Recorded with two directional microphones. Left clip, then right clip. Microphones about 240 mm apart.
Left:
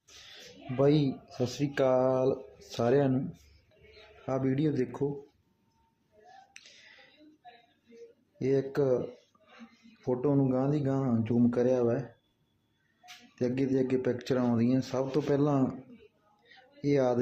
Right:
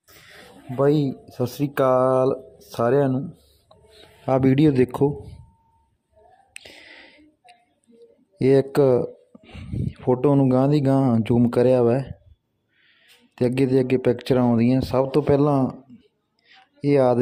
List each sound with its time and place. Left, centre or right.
0.8 s speech: right
4.3 s speech: right
6.5 s whispering: right
8.4 s speech: right
9.3 s a sound: right
10.1 s speech: right
13.3 s speech: right
16.5 s a sound: right